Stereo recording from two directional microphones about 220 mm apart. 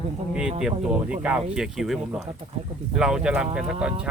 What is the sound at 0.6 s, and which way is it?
Speech, 5° right (ahead or behind).